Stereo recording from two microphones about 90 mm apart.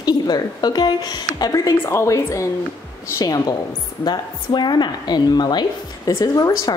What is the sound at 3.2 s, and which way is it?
Speech, 45° left (ahead or behind).